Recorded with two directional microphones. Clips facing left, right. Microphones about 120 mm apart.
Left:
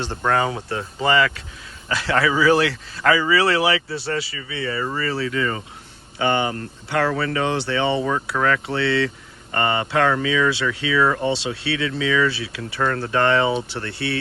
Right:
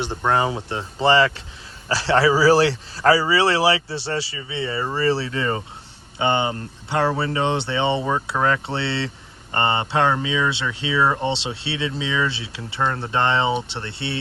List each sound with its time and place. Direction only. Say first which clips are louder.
0.0 s speech: even; 15° right (ahead or behind)